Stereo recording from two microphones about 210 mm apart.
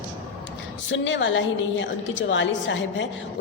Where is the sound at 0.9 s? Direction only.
60° left (ahead or behind).